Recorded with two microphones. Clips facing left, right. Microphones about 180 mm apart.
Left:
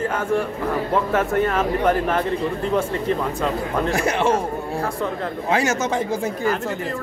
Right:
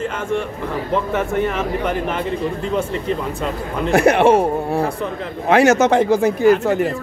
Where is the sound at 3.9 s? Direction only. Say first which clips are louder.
Right 9 dB; 65° right (ahead or behind).